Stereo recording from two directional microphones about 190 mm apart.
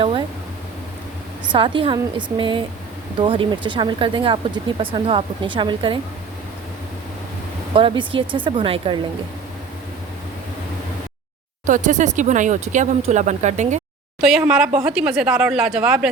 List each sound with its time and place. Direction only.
1.5 s speech: 25° right (ahead or behind)
7.7 s speech: 25° right (ahead or behind)
11.6 s speech: 40° right (ahead or behind)
14.2 s speech: centre (ahead or behind)